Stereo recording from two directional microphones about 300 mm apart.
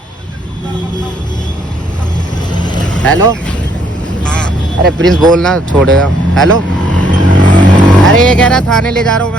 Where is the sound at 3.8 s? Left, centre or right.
Centre.